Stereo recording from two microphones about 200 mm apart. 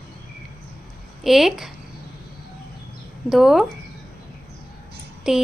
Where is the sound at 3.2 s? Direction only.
Centre (ahead or behind).